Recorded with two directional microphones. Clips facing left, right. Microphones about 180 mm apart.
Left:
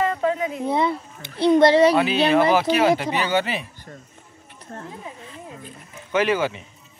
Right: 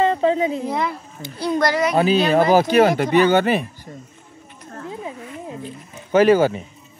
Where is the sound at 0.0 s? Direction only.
25° right (ahead or behind).